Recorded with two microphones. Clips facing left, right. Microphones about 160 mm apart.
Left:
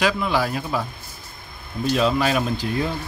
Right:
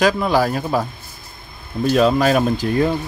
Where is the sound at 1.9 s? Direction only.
45° right (ahead or behind).